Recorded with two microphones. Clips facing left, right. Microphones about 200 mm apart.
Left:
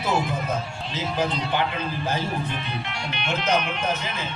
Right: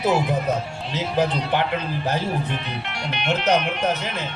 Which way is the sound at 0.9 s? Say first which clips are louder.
Right 4 dB; 65° right (ahead or behind).